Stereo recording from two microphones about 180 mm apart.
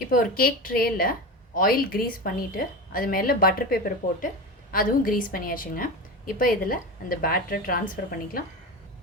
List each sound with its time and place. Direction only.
0.1 s a woman's voice: 50° left (ahead or behind)